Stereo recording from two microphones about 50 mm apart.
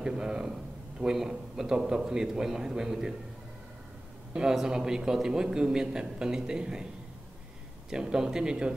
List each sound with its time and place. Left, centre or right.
0.0 s a sound: centre
1.0 s a man's voice: centre
4.3 s a man's voice: centre
7.9 s a man's voice: centre